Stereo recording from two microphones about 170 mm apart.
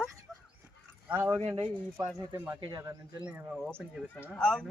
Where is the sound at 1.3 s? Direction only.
35° right (ahead or behind).